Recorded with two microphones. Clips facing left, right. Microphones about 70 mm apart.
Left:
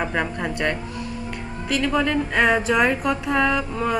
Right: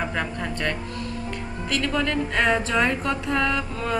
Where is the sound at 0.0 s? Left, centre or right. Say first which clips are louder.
Left 3 dB; centre.